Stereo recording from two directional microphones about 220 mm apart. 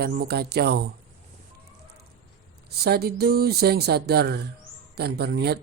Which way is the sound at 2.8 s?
45° right (ahead or behind).